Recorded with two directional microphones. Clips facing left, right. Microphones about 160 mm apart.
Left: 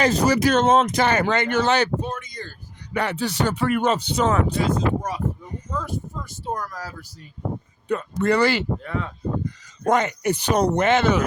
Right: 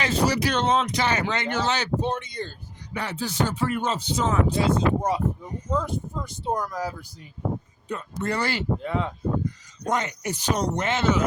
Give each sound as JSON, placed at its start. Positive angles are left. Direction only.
{"t": 0.0, "sound": "speech", "side_deg": 40}
{"t": 2.0, "sound": "speech", "side_deg": -30}
{"t": 2.9, "sound": "speech", "side_deg": 60}
{"t": 4.7, "sound": "speech", "side_deg": -25}
{"t": 7.9, "sound": "speech", "side_deg": 65}
{"t": 8.8, "sound": "speech", "side_deg": -20}
{"t": 9.8, "sound": "speech", "side_deg": 60}